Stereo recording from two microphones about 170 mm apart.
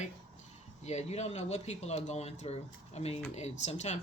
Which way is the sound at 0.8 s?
40° left (ahead or behind).